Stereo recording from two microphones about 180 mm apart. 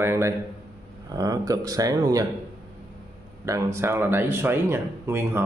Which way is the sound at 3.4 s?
15° right (ahead or behind).